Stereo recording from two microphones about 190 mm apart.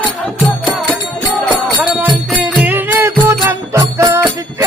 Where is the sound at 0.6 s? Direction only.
Centre (ahead or behind).